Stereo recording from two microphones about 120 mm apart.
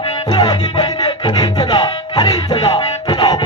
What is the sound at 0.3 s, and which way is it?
Music, 40° left (ahead or behind).